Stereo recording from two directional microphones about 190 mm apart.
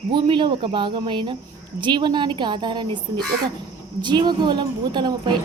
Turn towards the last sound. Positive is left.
turn(degrees=-25)  # may be behind; listen again after turning